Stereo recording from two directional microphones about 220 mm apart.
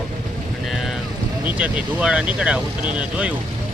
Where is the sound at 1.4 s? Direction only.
5° right (ahead or behind).